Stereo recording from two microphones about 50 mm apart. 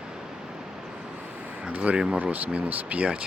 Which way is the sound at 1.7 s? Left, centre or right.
Right.